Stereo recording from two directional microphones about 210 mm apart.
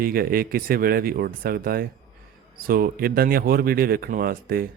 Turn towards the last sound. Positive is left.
turn(degrees=-45)  # may be behind; listen again after turning